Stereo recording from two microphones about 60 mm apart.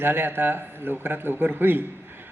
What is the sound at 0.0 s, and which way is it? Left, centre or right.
Speech, right.